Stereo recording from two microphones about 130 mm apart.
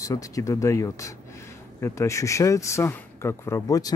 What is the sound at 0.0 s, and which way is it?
Speech, 25° left (ahead or behind).